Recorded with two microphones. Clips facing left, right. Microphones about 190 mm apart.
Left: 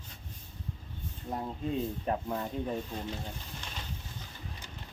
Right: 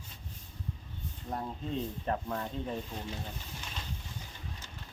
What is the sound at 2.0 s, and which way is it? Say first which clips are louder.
Speech: left 2 dB; 10° left (ahead or behind).